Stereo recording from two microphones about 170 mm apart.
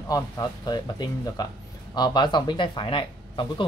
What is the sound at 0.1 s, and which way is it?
Speech, 20° left (ahead or behind).